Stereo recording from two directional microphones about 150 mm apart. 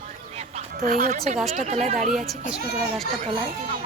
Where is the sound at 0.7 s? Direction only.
70° right (ahead or behind).